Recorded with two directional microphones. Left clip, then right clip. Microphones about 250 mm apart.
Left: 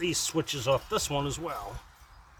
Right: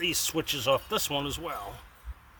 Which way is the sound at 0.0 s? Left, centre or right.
Right.